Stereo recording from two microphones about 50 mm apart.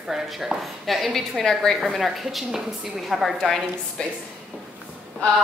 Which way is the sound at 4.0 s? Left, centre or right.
Centre.